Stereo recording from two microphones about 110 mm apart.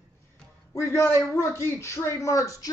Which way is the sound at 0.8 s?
25° left (ahead or behind).